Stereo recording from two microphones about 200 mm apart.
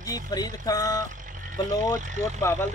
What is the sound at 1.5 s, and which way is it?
Speech, 20° left (ahead or behind).